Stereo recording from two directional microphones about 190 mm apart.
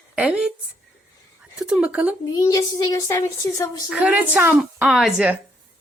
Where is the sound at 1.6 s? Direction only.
5° right (ahead or behind).